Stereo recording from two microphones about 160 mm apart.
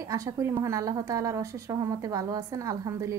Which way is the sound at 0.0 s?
20° right (ahead or behind).